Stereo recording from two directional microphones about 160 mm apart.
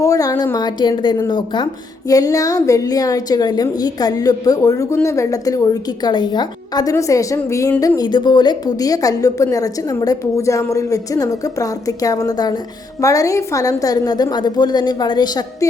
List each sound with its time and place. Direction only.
0.0 s a woman's voice: 20° left (ahead or behind)